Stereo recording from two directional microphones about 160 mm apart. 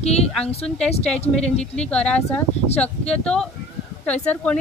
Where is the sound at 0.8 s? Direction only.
40° left (ahead or behind).